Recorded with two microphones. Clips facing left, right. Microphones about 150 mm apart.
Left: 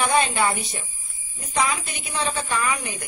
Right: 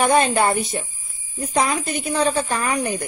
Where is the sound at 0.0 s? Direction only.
45° right (ahead or behind).